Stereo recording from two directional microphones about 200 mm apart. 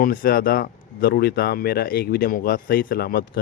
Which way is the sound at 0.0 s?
45° left (ahead or behind).